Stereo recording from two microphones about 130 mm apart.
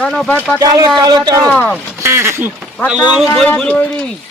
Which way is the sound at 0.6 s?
30° right (ahead or behind).